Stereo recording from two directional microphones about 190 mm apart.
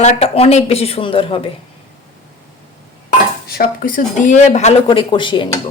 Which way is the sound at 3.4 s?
50° left (ahead or behind).